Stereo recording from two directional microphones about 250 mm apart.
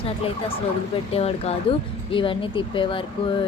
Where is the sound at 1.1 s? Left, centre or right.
Left.